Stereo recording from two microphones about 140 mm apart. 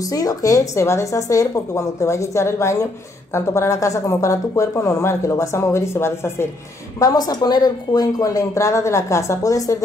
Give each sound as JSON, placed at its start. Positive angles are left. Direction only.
{"t": 0.1, "sound": "a woman's voice", "side_deg": 25}